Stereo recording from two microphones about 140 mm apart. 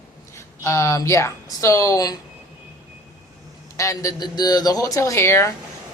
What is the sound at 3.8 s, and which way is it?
Speech, 20° left (ahead or behind).